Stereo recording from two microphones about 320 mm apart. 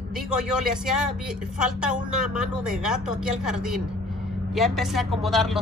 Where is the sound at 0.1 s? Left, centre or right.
Centre.